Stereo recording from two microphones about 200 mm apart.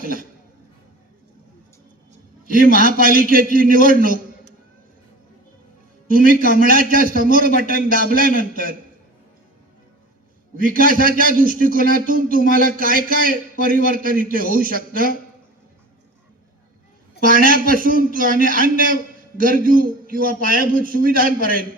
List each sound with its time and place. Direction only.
0.0 s speech: 45° right (ahead or behind)
2.5 s a man's voice: 45° right (ahead or behind)
6.1 s a man's voice: 45° right (ahead or behind)
10.6 s a man's voice: 45° right (ahead or behind)
17.2 s a man's voice: 45° right (ahead or behind)